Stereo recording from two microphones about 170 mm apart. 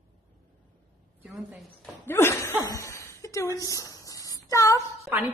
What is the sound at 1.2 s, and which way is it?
Speech, 10° right (ahead or behind).